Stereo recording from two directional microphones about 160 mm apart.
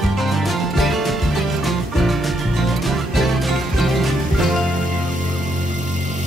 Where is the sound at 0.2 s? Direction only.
Centre (ahead or behind).